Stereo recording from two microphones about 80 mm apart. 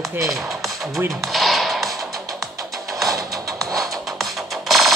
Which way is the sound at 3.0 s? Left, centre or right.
Right.